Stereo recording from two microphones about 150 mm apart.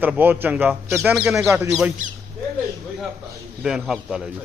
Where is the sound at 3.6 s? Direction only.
5° right (ahead or behind).